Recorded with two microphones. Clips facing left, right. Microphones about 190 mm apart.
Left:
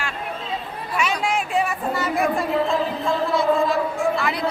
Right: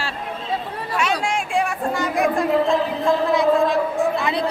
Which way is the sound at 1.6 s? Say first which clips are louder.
Right 4 dB; 5° left (ahead or behind).